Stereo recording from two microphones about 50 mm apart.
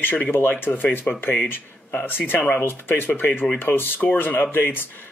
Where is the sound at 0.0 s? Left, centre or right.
Left.